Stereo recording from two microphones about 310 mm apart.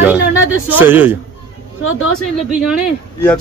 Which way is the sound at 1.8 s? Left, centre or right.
Left.